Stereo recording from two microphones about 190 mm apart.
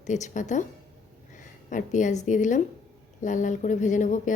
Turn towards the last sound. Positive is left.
turn(degrees=40)  # may be behind; listen again after turning